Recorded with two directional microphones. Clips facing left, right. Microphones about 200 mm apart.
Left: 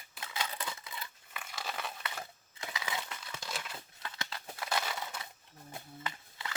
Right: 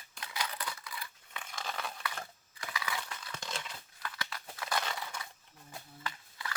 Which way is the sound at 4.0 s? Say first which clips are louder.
Right 2 dB; 25° left (ahead or behind).